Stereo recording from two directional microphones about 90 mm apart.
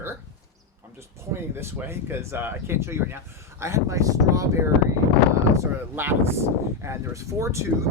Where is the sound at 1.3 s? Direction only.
25° right (ahead or behind).